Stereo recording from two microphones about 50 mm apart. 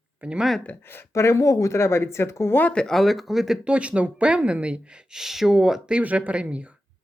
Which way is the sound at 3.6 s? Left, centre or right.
Right.